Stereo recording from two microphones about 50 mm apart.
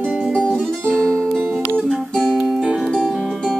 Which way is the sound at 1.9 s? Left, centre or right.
Centre.